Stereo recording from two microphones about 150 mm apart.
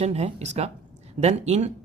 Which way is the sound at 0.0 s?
45° right (ahead or behind).